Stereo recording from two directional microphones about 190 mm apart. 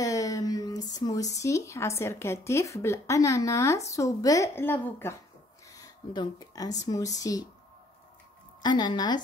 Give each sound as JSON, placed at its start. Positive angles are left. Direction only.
{"t": 0.0, "sound": "speech", "side_deg": 20}
{"t": 8.6, "sound": "a woman's voice", "side_deg": 20}